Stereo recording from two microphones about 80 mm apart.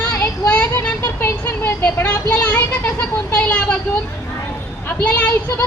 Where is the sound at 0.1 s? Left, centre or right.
Left.